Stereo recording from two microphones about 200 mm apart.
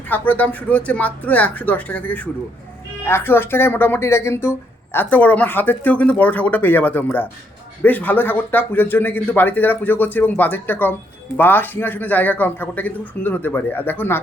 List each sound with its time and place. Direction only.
0.1 s speech: 10° left (ahead or behind)